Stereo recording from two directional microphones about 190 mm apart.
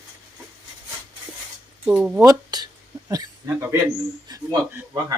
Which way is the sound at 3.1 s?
15° right (ahead or behind).